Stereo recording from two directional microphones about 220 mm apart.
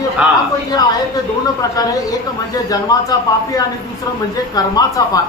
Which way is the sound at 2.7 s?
15° left (ahead or behind).